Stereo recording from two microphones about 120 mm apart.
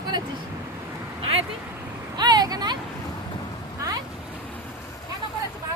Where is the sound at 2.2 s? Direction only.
35° right (ahead or behind).